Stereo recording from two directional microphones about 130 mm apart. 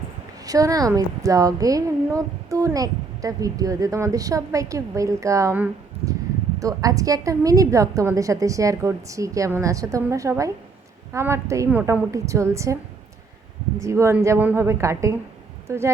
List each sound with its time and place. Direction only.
0.4 s a woman's voice: 25° right (ahead or behind)
6.6 s a woman's voice: 25° right (ahead or behind)
13.8 s a woman's voice: 20° right (ahead or behind)